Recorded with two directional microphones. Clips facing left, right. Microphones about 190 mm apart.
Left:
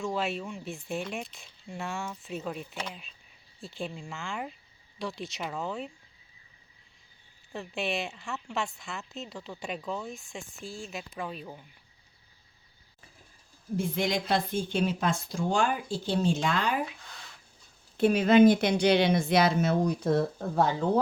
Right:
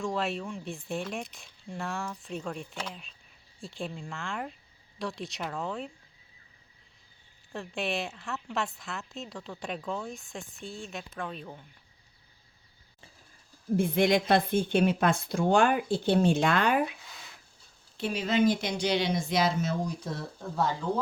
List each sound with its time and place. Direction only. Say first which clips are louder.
0.0 s a woman's voice: even; centre (ahead or behind)
7.5 s a woman's voice: even; centre (ahead or behind)
13.7 s speech: right 5 dB; 60° right (ahead or behind)
17.9 s speech: left 7 dB; 55° left (ahead or behind)